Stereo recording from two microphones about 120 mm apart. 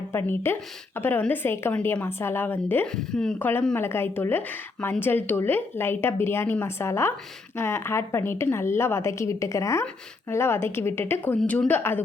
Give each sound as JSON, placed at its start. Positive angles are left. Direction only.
{"t": 0.1, "sound": "a woman's voice", "side_deg": 20}
{"t": 2.8, "sound": "speech", "side_deg": 5}
{"t": 3.3, "sound": "a woman's voice", "side_deg": 15}
{"t": 11.3, "sound": "a woman's voice", "side_deg": 5}